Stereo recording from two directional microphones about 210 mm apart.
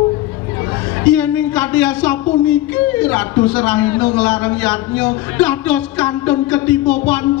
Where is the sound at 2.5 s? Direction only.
5° left (ahead or behind).